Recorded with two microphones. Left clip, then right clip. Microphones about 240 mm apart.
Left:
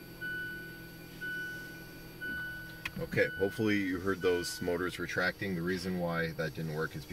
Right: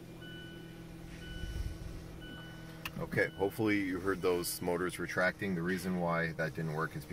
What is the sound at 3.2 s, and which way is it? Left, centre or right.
Speech, left.